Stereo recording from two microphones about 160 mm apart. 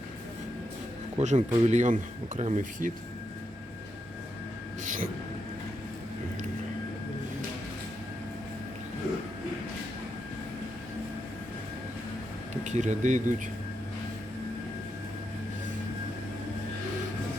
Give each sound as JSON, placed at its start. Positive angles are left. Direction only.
{"t": 1.2, "sound": "speech", "side_deg": -45}
{"t": 12.6, "sound": "speech", "side_deg": -50}